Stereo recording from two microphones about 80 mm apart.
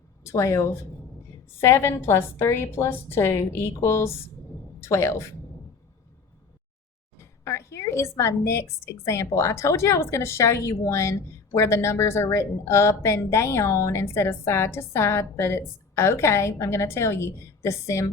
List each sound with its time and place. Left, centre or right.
0.3 s a woman's voice: left
1.6 s a woman's voice: left
7.4 s a woman's voice: left